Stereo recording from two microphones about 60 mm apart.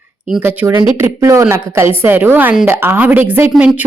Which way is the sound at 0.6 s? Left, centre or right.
Right.